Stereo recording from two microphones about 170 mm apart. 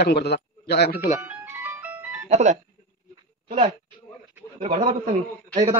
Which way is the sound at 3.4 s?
40° right (ahead or behind).